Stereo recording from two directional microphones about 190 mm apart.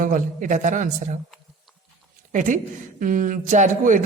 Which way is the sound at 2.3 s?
40° right (ahead or behind).